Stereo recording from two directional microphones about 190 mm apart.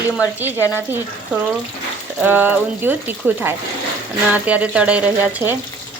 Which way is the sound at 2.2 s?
10° right (ahead or behind).